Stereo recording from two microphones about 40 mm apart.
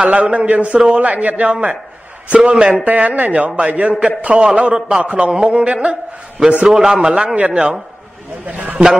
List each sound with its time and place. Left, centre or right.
0.0 s a man's voice: right
0.9 s a man's voice: right
2.8 s a man's voice: right
6.6 s a man's voice: centre
7.3 s a man's voice: right